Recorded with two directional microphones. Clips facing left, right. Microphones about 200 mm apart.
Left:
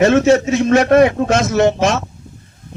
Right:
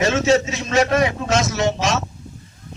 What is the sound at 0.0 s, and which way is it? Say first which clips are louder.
A man's voice: left 6 dB; 55° left (ahead or behind).